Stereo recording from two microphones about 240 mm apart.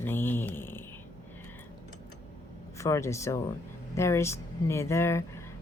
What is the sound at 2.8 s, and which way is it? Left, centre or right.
A woman's voice, centre.